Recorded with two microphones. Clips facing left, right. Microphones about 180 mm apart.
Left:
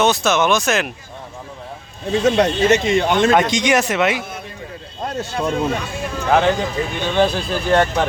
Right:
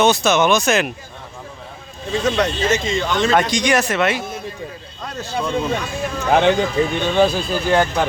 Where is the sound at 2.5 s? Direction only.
65° left (ahead or behind).